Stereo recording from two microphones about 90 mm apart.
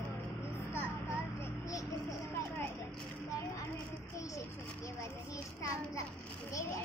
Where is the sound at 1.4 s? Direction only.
40° left (ahead or behind).